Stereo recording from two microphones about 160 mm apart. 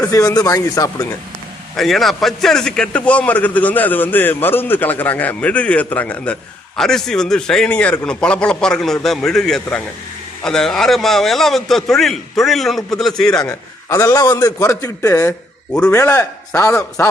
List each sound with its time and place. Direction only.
0.0 s a man's voice: 20° left (ahead or behind)
1.7 s a man's voice: centre (ahead or behind)
13.9 s a man's voice: 20° left (ahead or behind)